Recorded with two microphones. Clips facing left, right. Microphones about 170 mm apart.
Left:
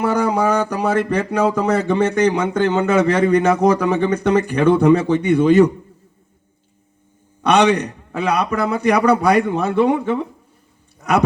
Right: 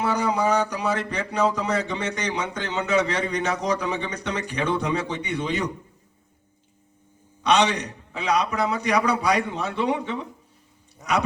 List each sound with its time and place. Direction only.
0.0 s speech: 50° left (ahead or behind)
7.4 s a man's voice: 55° left (ahead or behind)